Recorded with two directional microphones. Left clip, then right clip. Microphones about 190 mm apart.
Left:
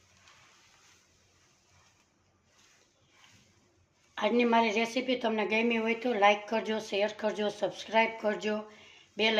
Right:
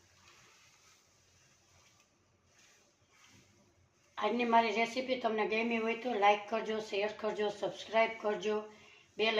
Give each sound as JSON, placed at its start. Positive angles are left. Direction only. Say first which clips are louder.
{"t": 4.1, "sound": "a woman's voice", "louder": "left 3 dB", "side_deg": 65}